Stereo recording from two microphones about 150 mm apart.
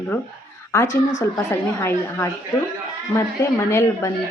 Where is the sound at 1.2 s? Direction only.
20° left (ahead or behind).